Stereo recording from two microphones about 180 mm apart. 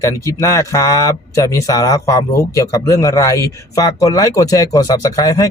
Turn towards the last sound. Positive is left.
turn(degrees=20)  # may be behind; listen again after turning